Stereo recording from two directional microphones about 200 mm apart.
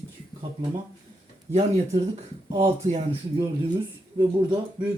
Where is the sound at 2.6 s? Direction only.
30° right (ahead or behind).